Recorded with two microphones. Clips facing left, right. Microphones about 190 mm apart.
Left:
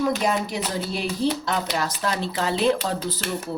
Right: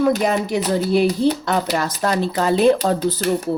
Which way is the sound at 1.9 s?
45° right (ahead or behind).